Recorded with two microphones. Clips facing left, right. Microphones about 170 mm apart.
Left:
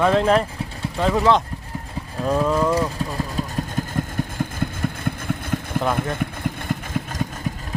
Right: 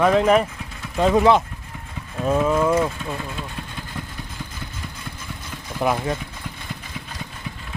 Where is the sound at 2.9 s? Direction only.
40° left (ahead or behind); by 5.8 s 55° left (ahead or behind).